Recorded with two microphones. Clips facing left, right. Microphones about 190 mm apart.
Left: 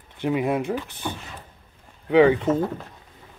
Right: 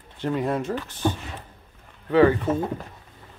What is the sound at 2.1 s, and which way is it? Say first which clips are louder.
Speech: left 2 dB; 15° left (ahead or behind).